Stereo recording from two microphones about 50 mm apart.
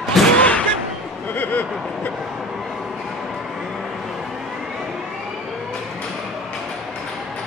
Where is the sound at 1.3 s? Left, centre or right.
Left.